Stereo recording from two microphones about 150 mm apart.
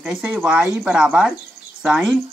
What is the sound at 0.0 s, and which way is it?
Speech, 5° right (ahead or behind).